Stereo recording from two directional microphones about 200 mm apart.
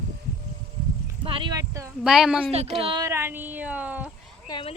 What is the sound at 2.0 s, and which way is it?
Speech, 5° right (ahead or behind).